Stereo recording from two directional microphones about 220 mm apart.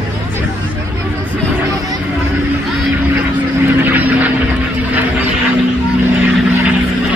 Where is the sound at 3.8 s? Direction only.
5° right (ahead or behind).